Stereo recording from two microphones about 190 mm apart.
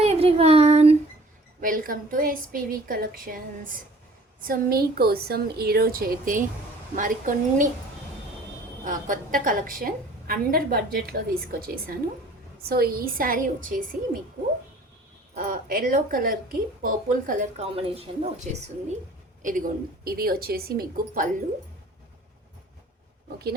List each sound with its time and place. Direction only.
0.0 s a sound: 30° right (ahead or behind)
1.6 s a woman's voice: 45° right (ahead or behind)
8.8 s a woman's voice: 45° right (ahead or behind)
15.4 s a woman's voice: 45° right (ahead or behind); by 18.3 s 30° right (ahead or behind)
19.4 s a woman's voice: 45° right (ahead or behind)